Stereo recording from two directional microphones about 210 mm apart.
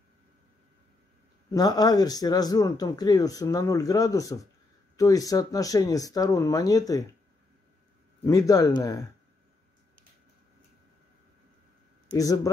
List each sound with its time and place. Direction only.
1.5 s speech: 20° left (ahead or behind)
8.3 s speech: 15° left (ahead or behind)
12.1 s a man's voice: 15° left (ahead or behind)